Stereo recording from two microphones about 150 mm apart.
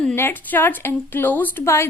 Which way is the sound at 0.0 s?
10° left (ahead or behind).